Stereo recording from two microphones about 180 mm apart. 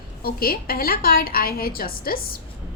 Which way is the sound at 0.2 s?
55° left (ahead or behind).